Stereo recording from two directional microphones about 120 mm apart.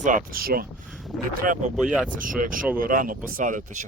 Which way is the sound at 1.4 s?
90° right.